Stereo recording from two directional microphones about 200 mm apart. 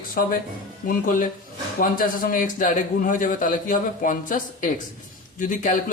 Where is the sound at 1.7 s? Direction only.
45° left (ahead or behind).